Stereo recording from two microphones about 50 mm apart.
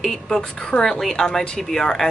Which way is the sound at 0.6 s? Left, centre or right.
Centre.